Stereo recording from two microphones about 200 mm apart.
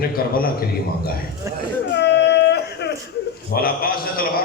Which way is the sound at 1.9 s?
55° left (ahead or behind).